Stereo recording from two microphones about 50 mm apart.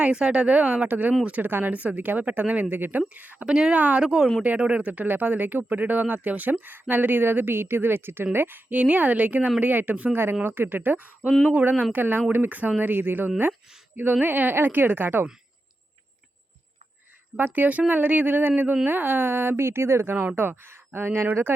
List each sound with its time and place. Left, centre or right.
0.0 s speech: right
1.5 s speech: right
1.7 s speech: right
3.4 s speech: centre
3.8 s speech: right
4.0 s speech: centre
4.4 s speech: right
4.9 s speech: right
8.8 s speech: right
10.4 s speech: right
12.8 s speech: right
17.3 s speech: right
21.2 s speech: right